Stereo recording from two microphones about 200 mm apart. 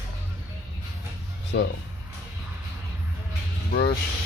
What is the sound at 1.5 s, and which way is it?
Speech, 60° left (ahead or behind).